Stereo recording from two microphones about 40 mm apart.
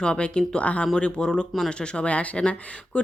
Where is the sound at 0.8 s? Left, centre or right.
Left.